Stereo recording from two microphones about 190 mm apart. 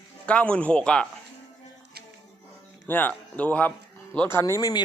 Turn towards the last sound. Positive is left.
turn(degrees=20)  # may be behind; listen again after turning